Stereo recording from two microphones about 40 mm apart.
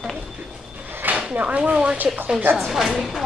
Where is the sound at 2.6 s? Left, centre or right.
Centre.